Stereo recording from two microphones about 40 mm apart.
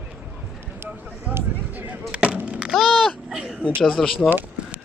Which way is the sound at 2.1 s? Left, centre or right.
Right.